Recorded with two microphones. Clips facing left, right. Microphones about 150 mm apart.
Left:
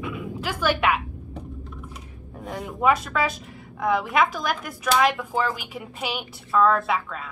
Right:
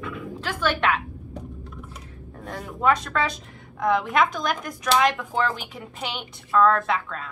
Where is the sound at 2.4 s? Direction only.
Centre (ahead or behind).